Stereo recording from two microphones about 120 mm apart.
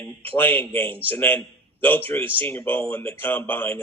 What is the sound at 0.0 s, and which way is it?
A man's voice, 15° left (ahead or behind).